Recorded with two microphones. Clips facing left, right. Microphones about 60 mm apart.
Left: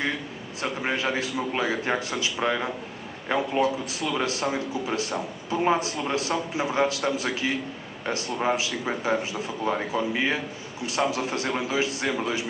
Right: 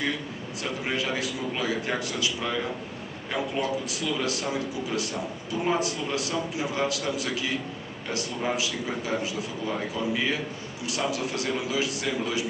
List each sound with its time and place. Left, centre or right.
0.6 s a man's voice: left